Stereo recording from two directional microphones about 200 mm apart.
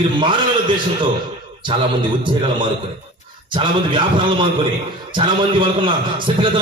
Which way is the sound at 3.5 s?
25° right (ahead or behind).